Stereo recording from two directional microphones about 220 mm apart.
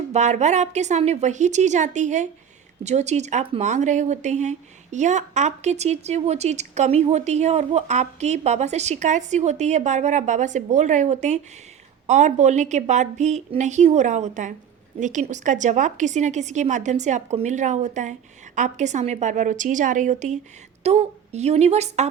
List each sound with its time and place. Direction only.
0.1 s a woman's voice: 30° right (ahead or behind)